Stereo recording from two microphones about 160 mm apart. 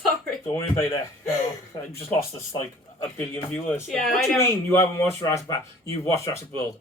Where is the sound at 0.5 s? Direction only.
20° left (ahead or behind).